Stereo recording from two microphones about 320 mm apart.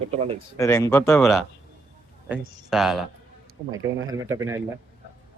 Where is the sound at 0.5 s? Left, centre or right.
Centre.